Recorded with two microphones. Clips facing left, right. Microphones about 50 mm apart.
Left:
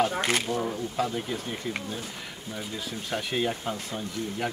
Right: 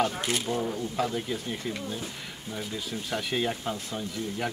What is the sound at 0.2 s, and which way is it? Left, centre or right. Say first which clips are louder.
Speech: left 3 dB; left.